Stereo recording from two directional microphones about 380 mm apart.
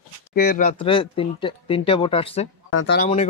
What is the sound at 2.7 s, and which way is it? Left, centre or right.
Speech, left.